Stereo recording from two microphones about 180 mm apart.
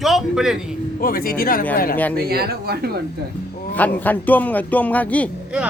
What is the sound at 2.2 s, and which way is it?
Speech, 60° right (ahead or behind).